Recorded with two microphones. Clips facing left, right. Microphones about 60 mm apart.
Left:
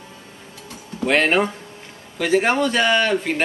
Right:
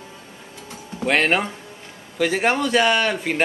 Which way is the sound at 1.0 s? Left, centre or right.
Centre.